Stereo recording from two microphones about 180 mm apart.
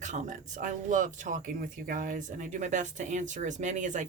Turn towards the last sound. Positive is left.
turn(degrees=-45)  # may be behind; listen again after turning